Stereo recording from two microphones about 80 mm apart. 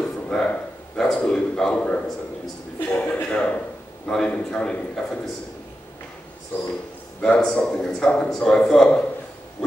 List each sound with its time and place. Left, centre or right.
0.0 s a sound: centre
0.9 s a man's voice: centre
6.5 s speech: left
7.2 s a man's voice: centre